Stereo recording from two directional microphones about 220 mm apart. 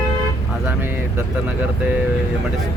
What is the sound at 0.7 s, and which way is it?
Speech, 10° right (ahead or behind).